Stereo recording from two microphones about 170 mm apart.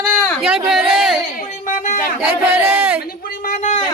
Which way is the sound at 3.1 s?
60° left (ahead or behind).